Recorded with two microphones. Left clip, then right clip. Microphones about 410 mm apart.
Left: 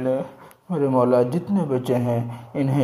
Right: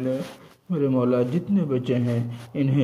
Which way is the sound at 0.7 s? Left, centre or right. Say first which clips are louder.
Left 4 dB; centre.